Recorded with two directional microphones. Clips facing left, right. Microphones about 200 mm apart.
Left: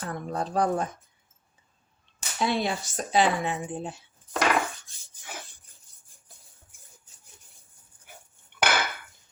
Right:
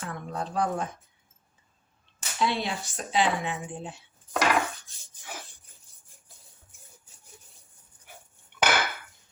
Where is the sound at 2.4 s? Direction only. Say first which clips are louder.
Left 2 dB; 45° left (ahead or behind).